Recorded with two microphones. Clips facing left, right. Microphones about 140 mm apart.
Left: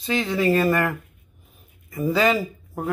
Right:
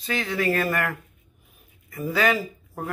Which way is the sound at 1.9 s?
20° left (ahead or behind).